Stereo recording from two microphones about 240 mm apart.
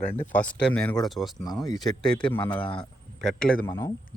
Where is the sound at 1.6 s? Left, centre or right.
Centre.